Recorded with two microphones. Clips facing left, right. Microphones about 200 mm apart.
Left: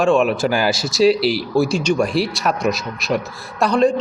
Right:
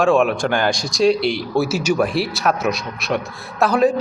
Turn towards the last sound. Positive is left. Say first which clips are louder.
# even
turn(degrees=-5)  # may be behind; listen again after turning